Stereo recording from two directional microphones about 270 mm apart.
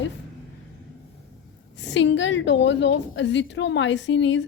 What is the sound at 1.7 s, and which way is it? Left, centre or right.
A woman's voice, left.